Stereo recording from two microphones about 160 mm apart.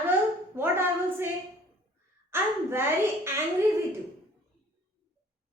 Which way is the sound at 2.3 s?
15° right (ahead or behind).